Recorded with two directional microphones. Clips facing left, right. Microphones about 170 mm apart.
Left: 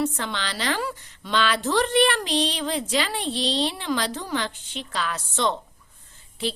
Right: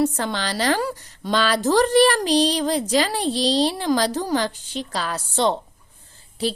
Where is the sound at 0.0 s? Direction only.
40° right (ahead or behind).